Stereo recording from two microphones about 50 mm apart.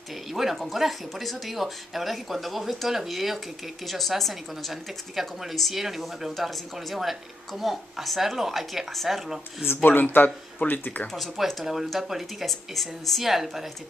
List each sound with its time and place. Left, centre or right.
0.3 s a woman's voice: centre
9.8 s speech: left
11.1 s a woman's voice: centre